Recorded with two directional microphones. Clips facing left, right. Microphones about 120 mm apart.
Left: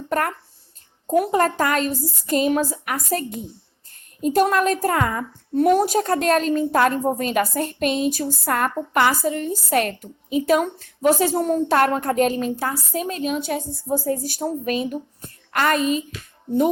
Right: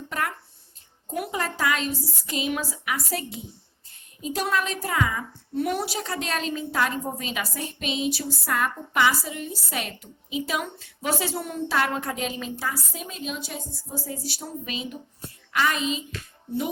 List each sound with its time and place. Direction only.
0.1 s a woman's voice: 45° left (ahead or behind)